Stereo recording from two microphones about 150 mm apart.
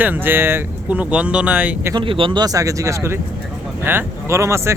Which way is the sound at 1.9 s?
35° right (ahead or behind).